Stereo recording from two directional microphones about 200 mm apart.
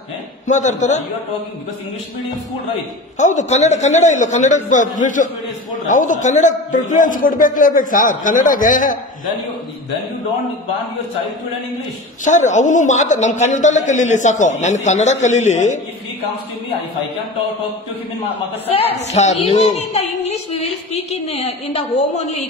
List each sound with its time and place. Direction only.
0.5 s a man's voice: 35° left (ahead or behind)
3.2 s a man's voice: 35° left (ahead or behind)
12.3 s a man's voice: 35° left (ahead or behind)
18.9 s a man's voice: 35° left (ahead or behind)